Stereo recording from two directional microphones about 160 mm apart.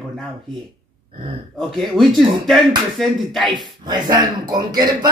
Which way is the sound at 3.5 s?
25° right (ahead or behind).